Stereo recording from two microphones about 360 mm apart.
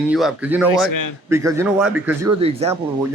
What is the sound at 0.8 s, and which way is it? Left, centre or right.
Speech, left.